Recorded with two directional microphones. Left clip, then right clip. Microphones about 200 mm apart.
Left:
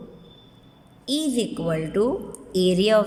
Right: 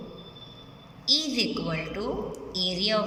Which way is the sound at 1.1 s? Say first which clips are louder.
Even; 35° left (ahead or behind).